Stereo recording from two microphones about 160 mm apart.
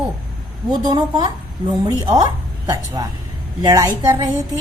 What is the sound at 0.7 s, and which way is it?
A woman's voice, 25° right (ahead or behind).